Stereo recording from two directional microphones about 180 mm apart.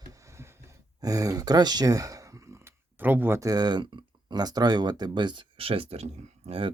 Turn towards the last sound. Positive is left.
turn(degrees=-30)  # may be behind; listen again after turning